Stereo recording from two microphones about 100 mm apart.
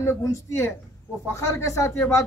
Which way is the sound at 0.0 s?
25° left (ahead or behind).